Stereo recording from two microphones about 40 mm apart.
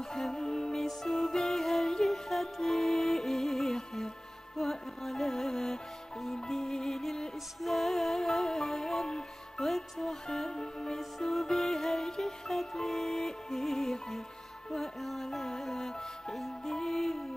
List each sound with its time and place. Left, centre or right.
0.0 s music: centre
11.0 s music: centre